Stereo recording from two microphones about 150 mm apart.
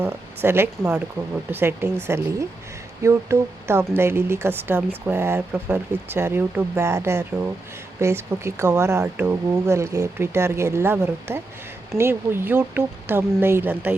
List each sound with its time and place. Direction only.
0.0 s speech: 15° right (ahead or behind)